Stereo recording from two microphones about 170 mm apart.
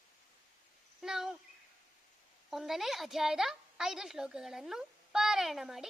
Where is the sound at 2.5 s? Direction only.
Centre (ahead or behind).